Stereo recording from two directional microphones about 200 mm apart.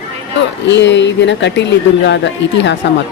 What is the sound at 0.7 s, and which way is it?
Speech, 65° left (ahead or behind).